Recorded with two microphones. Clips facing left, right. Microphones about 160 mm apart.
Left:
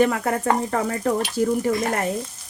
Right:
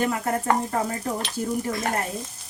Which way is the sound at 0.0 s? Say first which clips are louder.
Left 5 dB; 70° left (ahead or behind).